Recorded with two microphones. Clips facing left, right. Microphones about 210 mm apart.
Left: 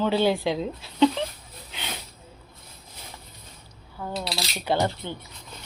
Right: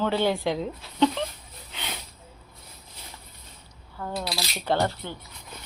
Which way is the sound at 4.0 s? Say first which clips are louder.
Even; 5° left (ahead or behind).